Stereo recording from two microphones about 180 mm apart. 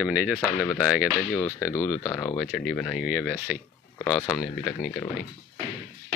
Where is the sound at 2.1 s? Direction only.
20° left (ahead or behind).